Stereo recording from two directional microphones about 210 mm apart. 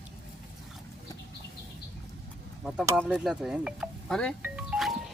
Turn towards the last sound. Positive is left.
turn(degrees=-5)  # may be behind; listen again after turning